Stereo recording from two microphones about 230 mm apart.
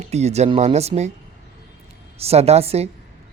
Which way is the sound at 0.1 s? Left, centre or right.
Right.